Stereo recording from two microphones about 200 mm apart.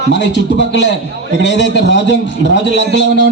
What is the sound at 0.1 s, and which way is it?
Speech, 60° left (ahead or behind).